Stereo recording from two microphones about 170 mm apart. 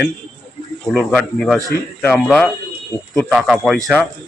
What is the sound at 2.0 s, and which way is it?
Speech, 10° left (ahead or behind).